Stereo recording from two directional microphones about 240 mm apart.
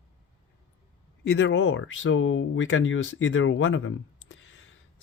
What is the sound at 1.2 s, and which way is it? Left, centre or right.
Speech, left.